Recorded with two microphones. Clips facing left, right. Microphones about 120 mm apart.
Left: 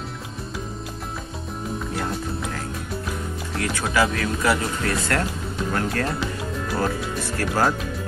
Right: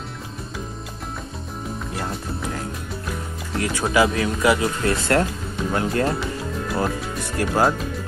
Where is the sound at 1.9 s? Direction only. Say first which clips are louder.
Left 1 dB; centre (ahead or behind).